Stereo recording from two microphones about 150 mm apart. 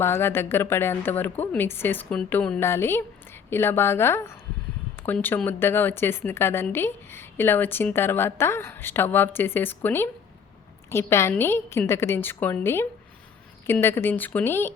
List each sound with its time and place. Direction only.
0.0 s a woman's voice: 15° left (ahead or behind)